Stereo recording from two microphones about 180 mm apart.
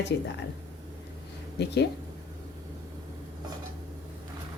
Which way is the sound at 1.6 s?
70° left (ahead or behind).